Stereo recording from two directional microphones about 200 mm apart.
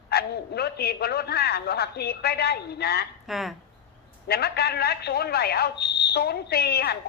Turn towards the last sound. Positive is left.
turn(degrees=50)  # may be behind; listen again after turning